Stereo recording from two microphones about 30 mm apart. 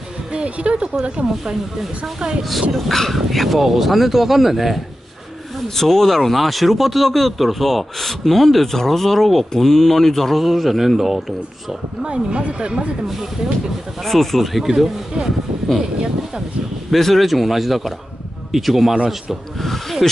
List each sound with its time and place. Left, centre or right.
0.3 s speech: right
2.7 s speech: centre
3.2 s speech: centre
5.8 s speech: centre
12.0 s speech: right
14.0 s speech: centre
14.6 s speech: centre
15.7 s speech: centre
16.9 s speech: centre
19.6 s speech: centre